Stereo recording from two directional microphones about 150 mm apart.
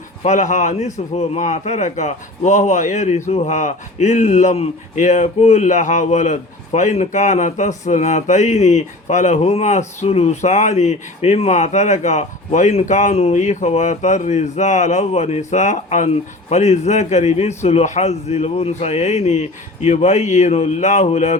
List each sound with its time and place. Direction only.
0.3 s a man's voice: 55° left (ahead or behind)